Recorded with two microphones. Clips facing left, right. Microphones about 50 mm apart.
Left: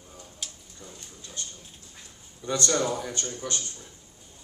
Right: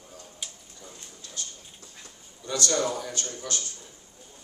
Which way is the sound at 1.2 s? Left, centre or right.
Left.